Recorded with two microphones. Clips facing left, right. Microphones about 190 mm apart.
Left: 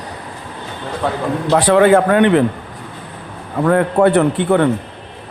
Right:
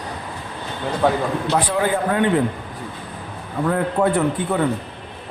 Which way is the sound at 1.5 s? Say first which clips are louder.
Left 11 dB; 75° left (ahead or behind).